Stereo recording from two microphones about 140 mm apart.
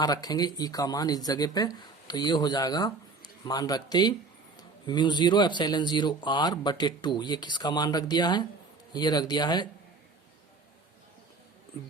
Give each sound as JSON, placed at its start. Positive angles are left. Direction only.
{"t": 0.0, "sound": "speech", "side_deg": 30}